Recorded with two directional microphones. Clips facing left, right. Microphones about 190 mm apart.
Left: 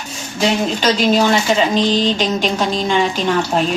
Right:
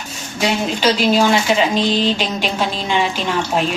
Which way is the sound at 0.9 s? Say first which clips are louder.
Even; 10° right (ahead or behind).